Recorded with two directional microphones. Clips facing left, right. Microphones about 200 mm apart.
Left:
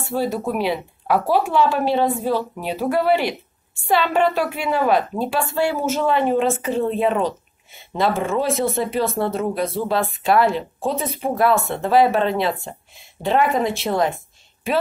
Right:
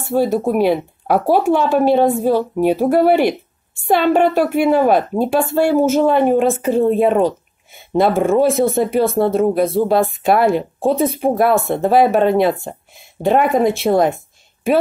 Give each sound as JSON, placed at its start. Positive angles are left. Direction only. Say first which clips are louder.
{"t": 0.1, "sound": "speech", "louder": "right 7 dB", "side_deg": -50}